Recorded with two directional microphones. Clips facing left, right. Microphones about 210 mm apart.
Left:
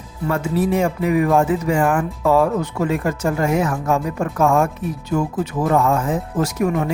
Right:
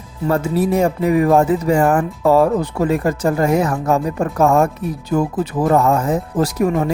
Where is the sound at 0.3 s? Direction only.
35° right (ahead or behind).